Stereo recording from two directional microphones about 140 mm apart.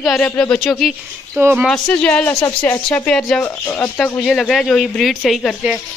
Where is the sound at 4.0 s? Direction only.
Centre (ahead or behind).